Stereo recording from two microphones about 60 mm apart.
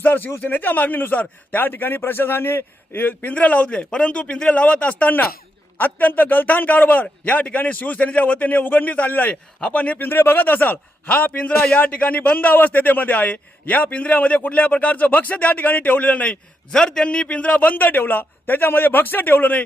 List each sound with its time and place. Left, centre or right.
0.0 s a man's voice: left
10.1 s a man's voice: left
16.7 s a man's voice: centre; by 19.6 s left